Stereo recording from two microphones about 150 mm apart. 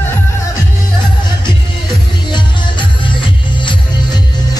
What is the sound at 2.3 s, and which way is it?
Music, 30° left (ahead or behind).